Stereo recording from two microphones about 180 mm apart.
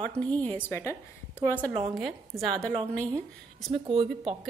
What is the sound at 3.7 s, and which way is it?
Speech, 30° right (ahead or behind).